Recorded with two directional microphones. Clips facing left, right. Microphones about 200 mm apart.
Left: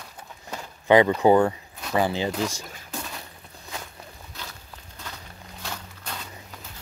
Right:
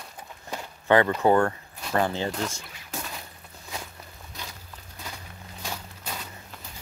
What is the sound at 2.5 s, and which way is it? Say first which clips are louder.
Speech: left 4 dB; 40° left (ahead or behind).